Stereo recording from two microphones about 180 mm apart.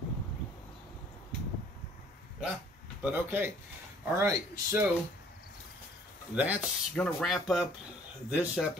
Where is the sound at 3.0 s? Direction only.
10° right (ahead or behind).